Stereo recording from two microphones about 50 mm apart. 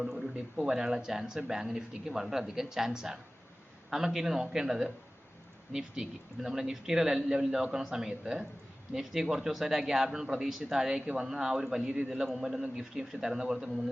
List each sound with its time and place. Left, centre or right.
0.0 s a sound: centre
0.5 s a man's voice: centre
12.0 s a man's voice: centre